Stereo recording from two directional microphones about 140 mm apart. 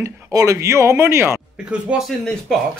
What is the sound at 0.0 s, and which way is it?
Speech, 25° right (ahead or behind).